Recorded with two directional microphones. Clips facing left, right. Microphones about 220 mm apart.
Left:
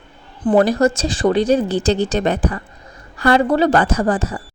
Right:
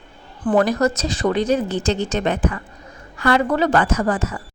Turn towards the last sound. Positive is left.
turn(degrees=35)  # may be behind; listen again after turning